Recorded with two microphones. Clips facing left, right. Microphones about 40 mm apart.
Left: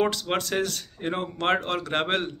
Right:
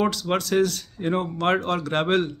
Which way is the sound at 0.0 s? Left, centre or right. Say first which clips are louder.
Right 2 dB; left.